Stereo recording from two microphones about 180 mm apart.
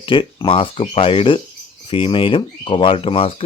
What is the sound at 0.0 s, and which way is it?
Speech, 30° left (ahead or behind).